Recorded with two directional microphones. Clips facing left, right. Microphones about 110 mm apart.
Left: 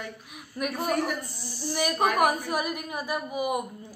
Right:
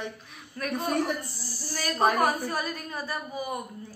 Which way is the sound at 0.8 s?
30° right (ahead or behind).